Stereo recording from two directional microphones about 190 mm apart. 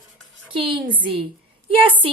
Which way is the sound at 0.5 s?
25° right (ahead or behind).